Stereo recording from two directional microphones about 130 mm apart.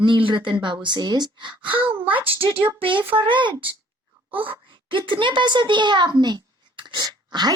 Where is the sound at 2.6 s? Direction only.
45° right (ahead or behind).